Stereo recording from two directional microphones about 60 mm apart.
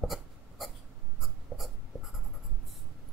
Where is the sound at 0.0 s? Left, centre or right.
Centre.